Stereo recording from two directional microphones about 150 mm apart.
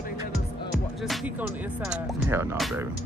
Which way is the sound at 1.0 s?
5° right (ahead or behind).